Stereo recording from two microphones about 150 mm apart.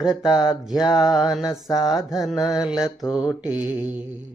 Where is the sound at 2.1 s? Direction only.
Centre (ahead or behind).